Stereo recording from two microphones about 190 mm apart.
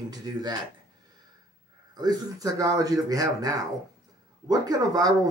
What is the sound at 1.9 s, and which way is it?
Speech, 20° right (ahead or behind).